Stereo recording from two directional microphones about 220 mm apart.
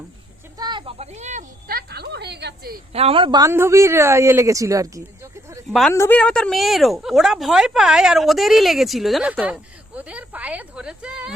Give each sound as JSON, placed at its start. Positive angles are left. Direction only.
{"t": 0.6, "sound": "speech", "side_deg": -20}
{"t": 2.9, "sound": "a man's voice", "side_deg": -25}
{"t": 5.6, "sound": "a woman's voice", "side_deg": 0}